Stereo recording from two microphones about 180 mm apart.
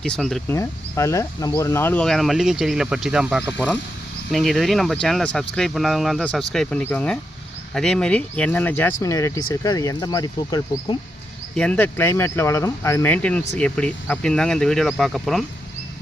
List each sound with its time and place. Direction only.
0.0 s speech: centre (ahead or behind)
0.5 s speech: 15° left (ahead or behind)
11.5 s speech: 5° left (ahead or behind)